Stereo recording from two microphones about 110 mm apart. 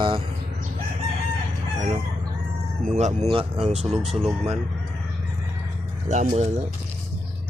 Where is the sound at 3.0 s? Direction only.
90° right.